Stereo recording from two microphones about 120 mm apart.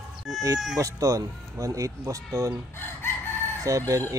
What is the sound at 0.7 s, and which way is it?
Speech, 30° right (ahead or behind).